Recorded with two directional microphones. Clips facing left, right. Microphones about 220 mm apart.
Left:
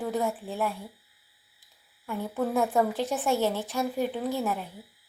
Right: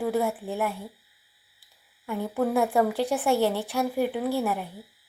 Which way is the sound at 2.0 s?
15° right (ahead or behind).